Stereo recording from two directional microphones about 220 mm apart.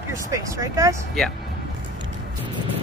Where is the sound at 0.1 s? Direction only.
15° right (ahead or behind).